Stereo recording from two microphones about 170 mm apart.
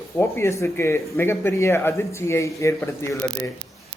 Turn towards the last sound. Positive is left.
turn(degrees=15)  # may be behind; listen again after turning